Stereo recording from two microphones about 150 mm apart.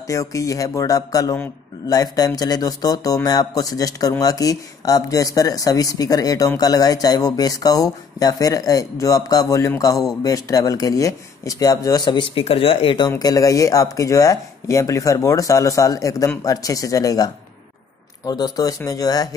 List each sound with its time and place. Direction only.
0.0 s speech: 20° left (ahead or behind)
13.2 s speech: 25° left (ahead or behind)